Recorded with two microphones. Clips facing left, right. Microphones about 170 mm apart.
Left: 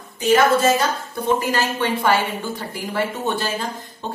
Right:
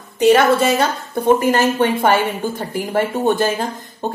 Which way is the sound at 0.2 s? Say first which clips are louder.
Right 3 dB; 70° right (ahead or behind).